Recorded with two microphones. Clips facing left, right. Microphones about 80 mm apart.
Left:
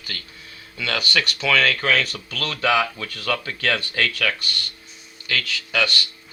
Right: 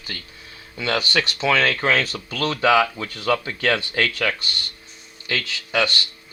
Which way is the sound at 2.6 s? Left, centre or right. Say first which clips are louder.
Right 3 dB; centre.